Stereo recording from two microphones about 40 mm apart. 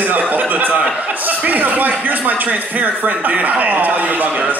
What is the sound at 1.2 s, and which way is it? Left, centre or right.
A man's voice, right.